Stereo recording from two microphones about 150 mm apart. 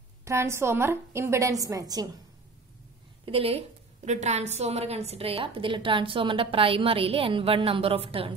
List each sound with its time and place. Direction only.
0.2 s a woman's voice: 20° right (ahead or behind)
3.3 s a woman's voice: 40° right (ahead or behind)